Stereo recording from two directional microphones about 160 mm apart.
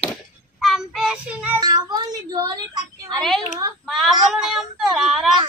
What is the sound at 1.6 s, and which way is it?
Speech, 25° right (ahead or behind).